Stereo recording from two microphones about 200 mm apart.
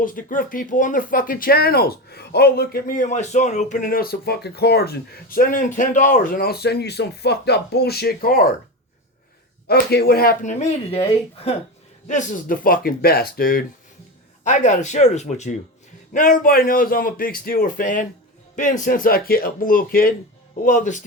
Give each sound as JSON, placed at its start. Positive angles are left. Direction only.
{"t": 0.0, "sound": "speech", "side_deg": 45}
{"t": 9.6, "sound": "speech", "side_deg": 50}